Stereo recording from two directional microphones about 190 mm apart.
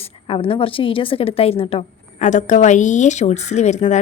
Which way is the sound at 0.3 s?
30° left (ahead or behind).